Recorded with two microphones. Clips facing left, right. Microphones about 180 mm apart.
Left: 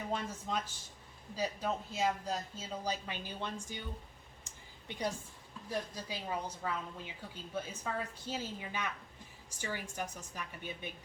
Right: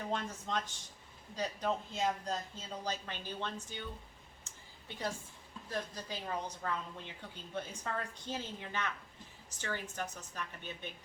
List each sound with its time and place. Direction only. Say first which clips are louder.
0.1 s speech: even; 5° left (ahead or behind)
4.4 s a sound: left 3 dB; 15° left (ahead or behind)
5.7 s speech: left 1 dB; 10° left (ahead or behind)